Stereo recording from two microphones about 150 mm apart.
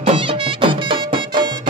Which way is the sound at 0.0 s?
35° right (ahead or behind).